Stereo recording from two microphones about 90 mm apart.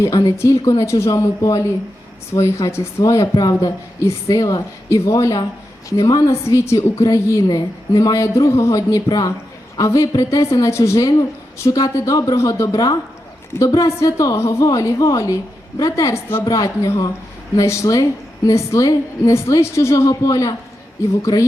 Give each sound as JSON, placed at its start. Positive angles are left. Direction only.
{"t": 0.0, "sound": "a woman's voice", "side_deg": 45}